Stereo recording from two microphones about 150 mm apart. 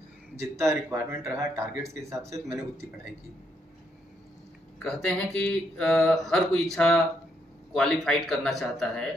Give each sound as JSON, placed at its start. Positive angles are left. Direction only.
{"t": 0.8, "sound": "speech", "side_deg": -15}
{"t": 4.7, "sound": "speech", "side_deg": 5}